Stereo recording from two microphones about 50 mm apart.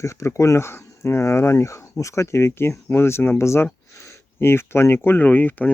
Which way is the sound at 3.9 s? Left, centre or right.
Left.